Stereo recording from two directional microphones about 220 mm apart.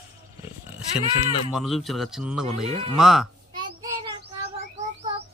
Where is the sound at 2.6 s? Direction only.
25° right (ahead or behind).